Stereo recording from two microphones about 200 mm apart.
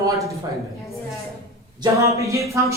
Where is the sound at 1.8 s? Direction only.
15° right (ahead or behind).